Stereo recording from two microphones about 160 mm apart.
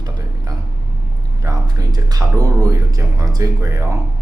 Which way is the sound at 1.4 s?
20° right (ahead or behind).